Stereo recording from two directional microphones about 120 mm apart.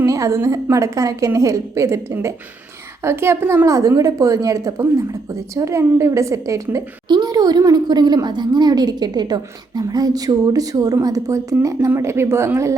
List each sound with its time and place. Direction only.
0.0 s a woman's voice: 25° right (ahead or behind)